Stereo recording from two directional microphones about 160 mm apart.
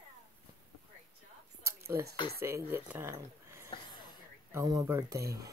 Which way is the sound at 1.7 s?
15° right (ahead or behind).